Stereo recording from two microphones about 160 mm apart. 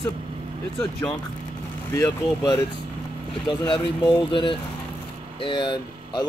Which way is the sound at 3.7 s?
30° left (ahead or behind).